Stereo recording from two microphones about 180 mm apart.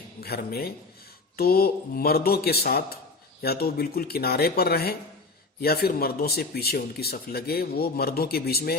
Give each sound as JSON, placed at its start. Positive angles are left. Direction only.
{"t": 0.2, "sound": "speech", "side_deg": 60}